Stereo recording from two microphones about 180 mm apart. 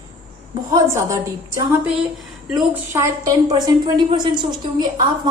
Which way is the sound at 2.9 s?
20° right (ahead or behind).